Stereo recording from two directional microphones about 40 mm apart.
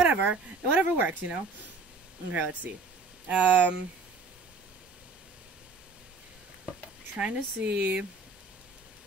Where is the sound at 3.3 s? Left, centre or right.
Right.